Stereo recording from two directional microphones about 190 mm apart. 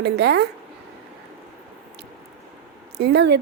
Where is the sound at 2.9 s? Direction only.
60° right (ahead or behind).